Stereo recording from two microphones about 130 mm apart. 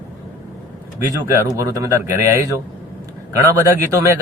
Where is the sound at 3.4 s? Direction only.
25° right (ahead or behind).